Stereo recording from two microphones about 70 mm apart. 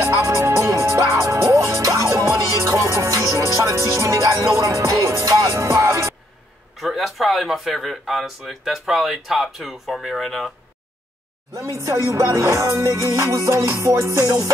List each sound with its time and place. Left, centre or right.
0.0 s music: right
6.8 s speech: centre
11.5 s music: right